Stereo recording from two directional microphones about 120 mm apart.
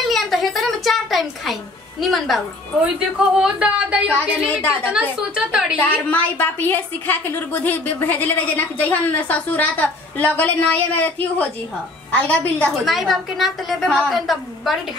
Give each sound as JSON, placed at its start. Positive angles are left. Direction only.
{"t": 0.1, "sound": "music", "side_deg": 0}
{"t": 3.3, "sound": "a woman's voice", "side_deg": -10}
{"t": 4.1, "sound": "a woman's voice", "side_deg": 15}
{"t": 4.9, "sound": "a woman's voice", "side_deg": -5}
{"t": 6.0, "sound": "a woman's voice", "side_deg": 15}
{"t": 12.8, "sound": "a woman's voice", "side_deg": 0}